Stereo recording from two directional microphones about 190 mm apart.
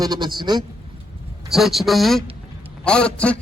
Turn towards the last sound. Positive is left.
turn(degrees=5)  # may be behind; listen again after turning